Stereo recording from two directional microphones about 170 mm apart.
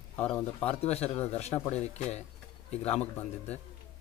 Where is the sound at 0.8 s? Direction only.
35° left (ahead or behind).